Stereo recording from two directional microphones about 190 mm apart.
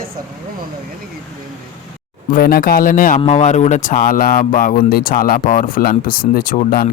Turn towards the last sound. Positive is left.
turn(degrees=50)  # may be behind; listen again after turning